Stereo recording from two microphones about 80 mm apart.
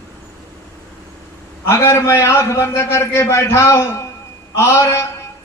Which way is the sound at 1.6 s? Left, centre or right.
Left.